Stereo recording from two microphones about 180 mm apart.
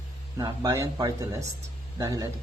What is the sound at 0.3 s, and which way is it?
Speech, 20° right (ahead or behind).